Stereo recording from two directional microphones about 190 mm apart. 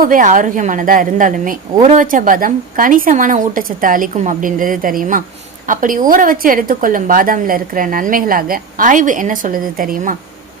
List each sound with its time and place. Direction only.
0.0 s a woman's voice: 45° right (ahead or behind)